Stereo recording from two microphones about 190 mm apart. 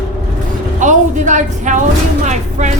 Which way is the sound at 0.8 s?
40° right (ahead or behind).